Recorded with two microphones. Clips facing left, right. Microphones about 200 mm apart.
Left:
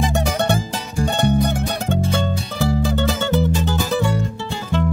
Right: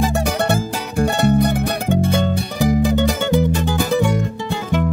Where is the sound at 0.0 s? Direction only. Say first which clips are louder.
Right 1 dB; 5° right (ahead or behind).